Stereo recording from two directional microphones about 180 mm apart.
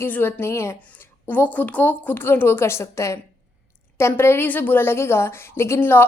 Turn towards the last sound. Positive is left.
turn(degrees=10)  # may be behind; listen again after turning